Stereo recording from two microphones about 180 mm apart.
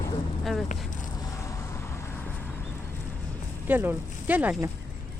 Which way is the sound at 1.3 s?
20° left (ahead or behind).